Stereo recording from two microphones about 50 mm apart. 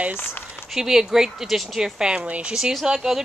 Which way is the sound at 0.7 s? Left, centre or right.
Centre.